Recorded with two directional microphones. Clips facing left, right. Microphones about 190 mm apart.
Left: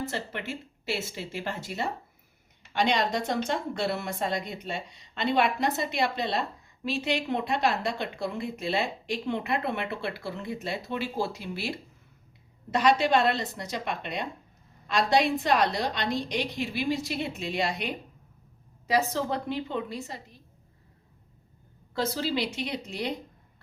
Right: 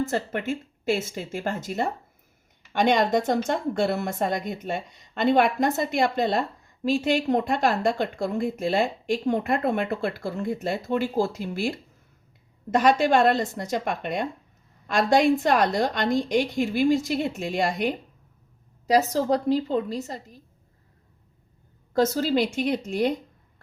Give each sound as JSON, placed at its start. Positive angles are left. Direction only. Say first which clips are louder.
{"t": 0.1, "sound": "a woman's voice", "louder": "right 7 dB", "side_deg": -45}
{"t": 21.9, "sound": "a woman's voice", "louder": "right 7 dB", "side_deg": -45}